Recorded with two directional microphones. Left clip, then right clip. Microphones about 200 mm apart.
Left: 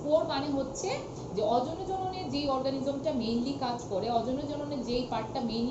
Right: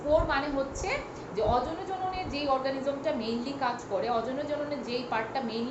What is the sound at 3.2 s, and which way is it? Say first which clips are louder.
A woman's voice: right 1 dB; 20° right (ahead or behind).